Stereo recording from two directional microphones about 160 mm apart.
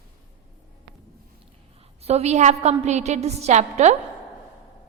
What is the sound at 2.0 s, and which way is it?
A woman's voice, 40° right (ahead or behind).